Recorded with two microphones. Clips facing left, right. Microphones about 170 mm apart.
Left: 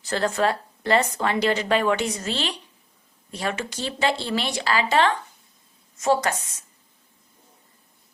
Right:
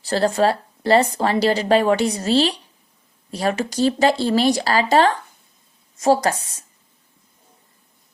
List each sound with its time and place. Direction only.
0.0 s speech: 35° right (ahead or behind)